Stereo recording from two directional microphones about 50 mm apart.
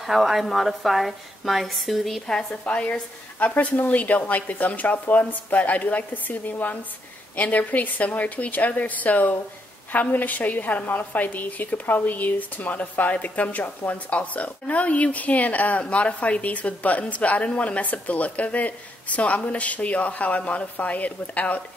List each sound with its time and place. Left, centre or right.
0.0 s a woman's voice: centre
2.5 s a woman's voice: left